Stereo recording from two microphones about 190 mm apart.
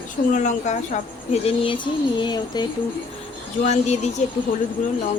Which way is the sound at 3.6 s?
35° left (ahead or behind).